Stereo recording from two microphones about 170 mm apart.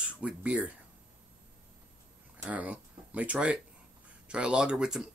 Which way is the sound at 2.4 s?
10° right (ahead or behind).